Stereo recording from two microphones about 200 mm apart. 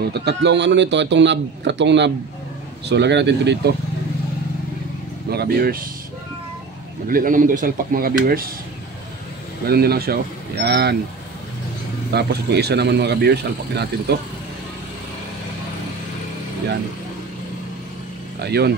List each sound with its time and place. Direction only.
0.1 s a man's voice: 55° right (ahead or behind)
5.3 s speech: 50° right (ahead or behind)
7.1 s speech: 45° right (ahead or behind)
9.7 s speech: 50° right (ahead or behind)
12.1 s a man's voice: 55° right (ahead or behind)
18.4 s speech: 55° right (ahead or behind)